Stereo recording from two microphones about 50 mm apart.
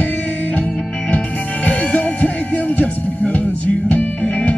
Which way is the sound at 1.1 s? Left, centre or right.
Left.